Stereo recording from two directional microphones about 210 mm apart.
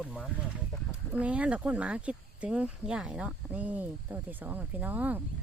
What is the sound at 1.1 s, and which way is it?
Speech, 5° right (ahead or behind).